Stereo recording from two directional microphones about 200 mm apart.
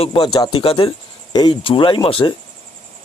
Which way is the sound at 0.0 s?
25° left (ahead or behind).